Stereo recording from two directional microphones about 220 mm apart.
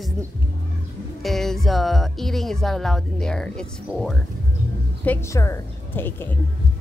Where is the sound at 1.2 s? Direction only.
Centre (ahead or behind).